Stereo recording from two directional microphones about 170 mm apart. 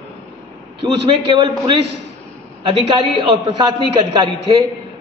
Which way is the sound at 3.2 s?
30° right (ahead or behind).